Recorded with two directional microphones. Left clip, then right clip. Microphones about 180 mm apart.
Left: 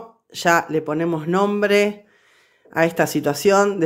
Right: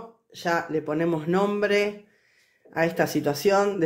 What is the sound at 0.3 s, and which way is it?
Speech, 30° left (ahead or behind).